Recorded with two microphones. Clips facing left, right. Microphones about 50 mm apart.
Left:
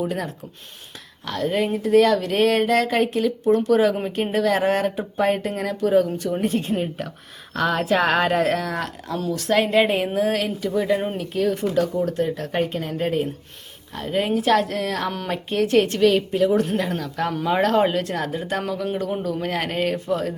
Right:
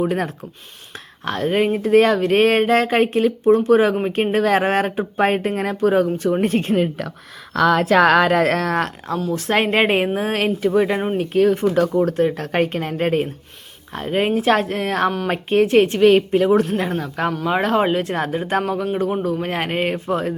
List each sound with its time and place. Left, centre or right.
0.0 s speech: right
3.4 s speech: right
3.7 s speech: right
7.7 s speech: right
9.3 s speech: right
16.1 s speech: right
17.4 s speech: centre; by 20.3 s right